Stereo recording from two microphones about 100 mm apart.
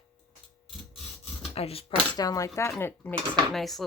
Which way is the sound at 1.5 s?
75° left (ahead or behind).